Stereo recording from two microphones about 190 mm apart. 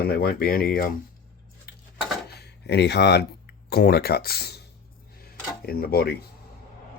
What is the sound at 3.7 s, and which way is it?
Speech, 55° left (ahead or behind).